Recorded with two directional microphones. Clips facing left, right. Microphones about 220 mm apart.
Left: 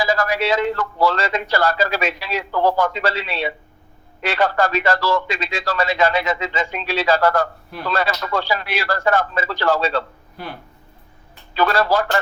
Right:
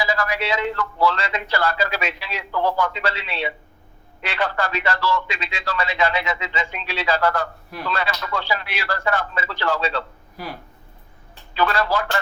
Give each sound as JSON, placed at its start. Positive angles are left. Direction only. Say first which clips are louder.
{"t": 0.0, "sound": "speech", "louder": "left 4 dB", "side_deg": 45}
{"t": 10.3, "sound": "speech", "louder": "even", "side_deg": 0}
{"t": 11.5, "sound": "speech", "louder": "left 4 dB", "side_deg": 40}